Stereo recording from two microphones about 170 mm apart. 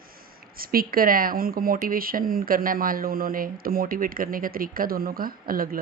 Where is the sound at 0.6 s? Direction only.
60° right (ahead or behind).